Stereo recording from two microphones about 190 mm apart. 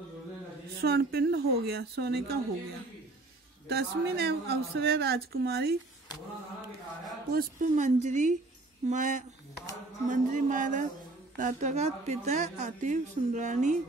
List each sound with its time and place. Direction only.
0.8 s a woman's voice: 55° right (ahead or behind)
3.6 s a woman's voice: 60° right (ahead or behind)
7.3 s a woman's voice: 40° right (ahead or behind)